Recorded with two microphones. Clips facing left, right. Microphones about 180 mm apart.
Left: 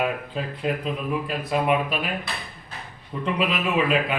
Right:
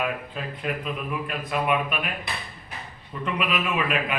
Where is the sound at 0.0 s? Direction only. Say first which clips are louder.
Left 3 dB; 25° left (ahead or behind).